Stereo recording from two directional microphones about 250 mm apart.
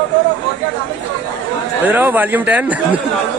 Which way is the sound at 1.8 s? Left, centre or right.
Centre.